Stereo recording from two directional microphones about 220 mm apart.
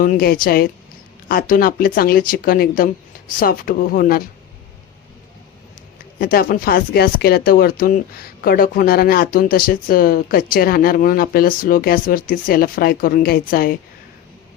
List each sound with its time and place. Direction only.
0.0 s speech: 40° left (ahead or behind)
6.1 s speech: 40° left (ahead or behind)